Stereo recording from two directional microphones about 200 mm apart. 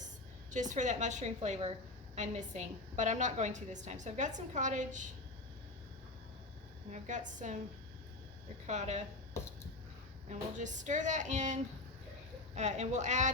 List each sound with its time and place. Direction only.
0.5 s a woman's voice: 40° right (ahead or behind)
6.9 s a woman's voice: 40° right (ahead or behind)
8.6 s a woman's voice: 35° right (ahead or behind)
9.4 s a sound: 15° left (ahead or behind)
10.2 s a woman's voice: 40° right (ahead or behind)